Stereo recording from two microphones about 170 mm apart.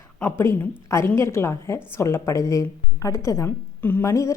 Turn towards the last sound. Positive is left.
turn(degrees=20)  # may be behind; listen again after turning